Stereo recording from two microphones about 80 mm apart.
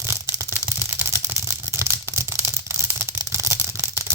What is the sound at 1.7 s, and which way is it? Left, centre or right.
Toothbrush, right.